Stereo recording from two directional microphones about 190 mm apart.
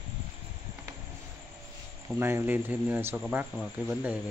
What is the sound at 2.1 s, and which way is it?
Speech, 10° right (ahead or behind).